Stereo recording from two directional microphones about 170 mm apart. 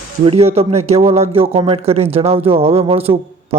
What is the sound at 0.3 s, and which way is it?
Speech, 35° right (ahead or behind).